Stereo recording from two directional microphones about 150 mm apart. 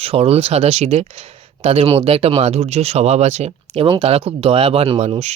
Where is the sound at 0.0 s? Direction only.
40° right (ahead or behind).